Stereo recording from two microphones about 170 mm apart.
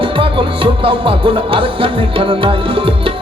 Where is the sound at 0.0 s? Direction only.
30° right (ahead or behind).